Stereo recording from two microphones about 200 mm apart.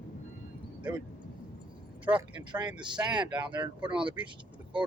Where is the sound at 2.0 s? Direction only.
25° right (ahead or behind).